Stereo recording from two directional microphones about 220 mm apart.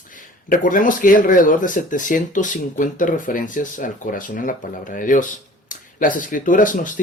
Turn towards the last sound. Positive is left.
turn(degrees=35)  # may be behind; listen again after turning